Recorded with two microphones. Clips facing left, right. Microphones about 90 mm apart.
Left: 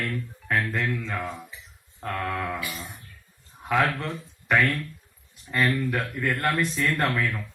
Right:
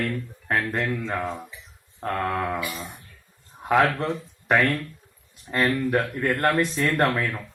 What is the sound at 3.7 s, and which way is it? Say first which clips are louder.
Speech: right 4 dB; 35° right (ahead or behind).